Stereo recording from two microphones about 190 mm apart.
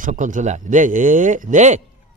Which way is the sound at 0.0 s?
45° right (ahead or behind).